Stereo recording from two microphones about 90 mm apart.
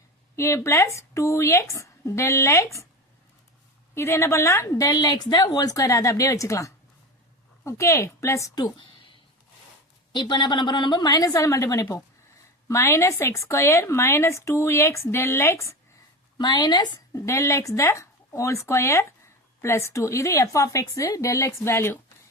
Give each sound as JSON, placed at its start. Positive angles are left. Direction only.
{"t": 0.3, "sound": "speech", "side_deg": 30}
{"t": 3.9, "sound": "speech", "side_deg": 30}
{"t": 4.9, "sound": "speech", "side_deg": 50}
{"t": 10.1, "sound": "a woman's voice", "side_deg": 60}
{"t": 16.4, "sound": "a woman's voice", "side_deg": 50}
{"t": 17.1, "sound": "speech", "side_deg": 35}